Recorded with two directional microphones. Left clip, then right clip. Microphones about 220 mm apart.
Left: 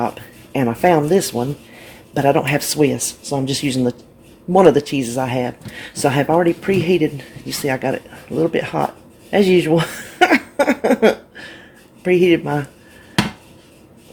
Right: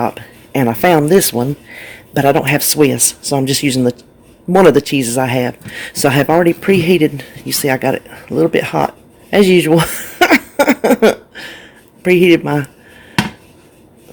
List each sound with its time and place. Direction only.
0.0 s speech: 25° right (ahead or behind)
9.3 s a sound: 25° right (ahead or behind)
12.0 s speech: 30° right (ahead or behind)